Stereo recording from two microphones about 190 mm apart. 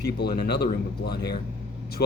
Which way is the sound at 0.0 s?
60° left (ahead or behind).